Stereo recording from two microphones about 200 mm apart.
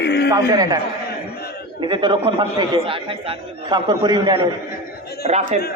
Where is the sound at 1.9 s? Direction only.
25° right (ahead or behind).